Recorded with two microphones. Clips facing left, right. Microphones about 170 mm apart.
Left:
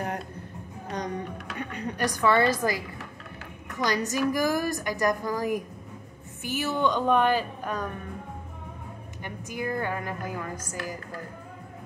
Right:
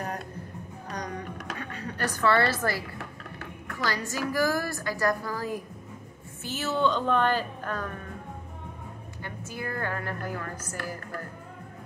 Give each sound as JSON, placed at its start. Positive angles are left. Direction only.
{"t": 0.9, "sound": "a sound", "side_deg": 25}
{"t": 3.6, "sound": "a woman's voice", "side_deg": 20}
{"t": 9.2, "sound": "a woman's voice", "side_deg": 15}